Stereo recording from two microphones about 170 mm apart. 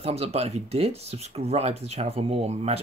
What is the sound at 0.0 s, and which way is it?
Speech, 40° right (ahead or behind).